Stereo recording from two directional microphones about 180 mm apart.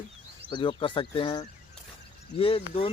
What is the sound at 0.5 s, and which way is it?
Speech, 25° left (ahead or behind).